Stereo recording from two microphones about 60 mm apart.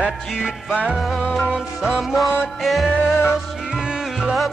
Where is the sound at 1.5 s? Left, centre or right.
Centre.